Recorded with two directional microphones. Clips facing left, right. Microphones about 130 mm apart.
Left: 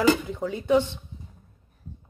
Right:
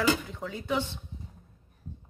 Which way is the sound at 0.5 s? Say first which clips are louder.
Left 9 dB; 20° left (ahead or behind).